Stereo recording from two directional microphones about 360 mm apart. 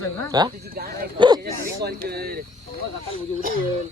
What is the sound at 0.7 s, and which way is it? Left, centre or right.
Speech, right.